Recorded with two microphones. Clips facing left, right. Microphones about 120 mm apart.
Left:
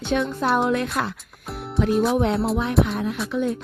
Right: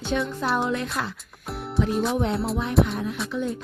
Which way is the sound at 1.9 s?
Centre (ahead or behind).